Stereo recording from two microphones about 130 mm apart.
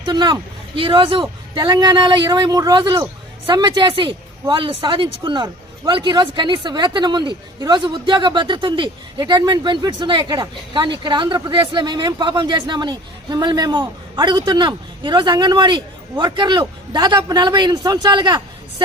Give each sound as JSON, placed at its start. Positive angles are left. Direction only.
{"t": 0.1, "sound": "speech", "side_deg": -35}